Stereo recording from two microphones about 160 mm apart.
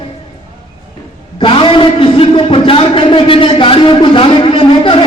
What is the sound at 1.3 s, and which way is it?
A man's voice, 30° left (ahead or behind).